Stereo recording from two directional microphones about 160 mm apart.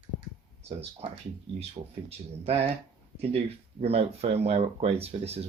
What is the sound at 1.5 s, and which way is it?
Speech, 40° right (ahead or behind).